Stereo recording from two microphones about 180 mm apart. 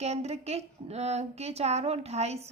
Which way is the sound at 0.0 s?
35° right (ahead or behind).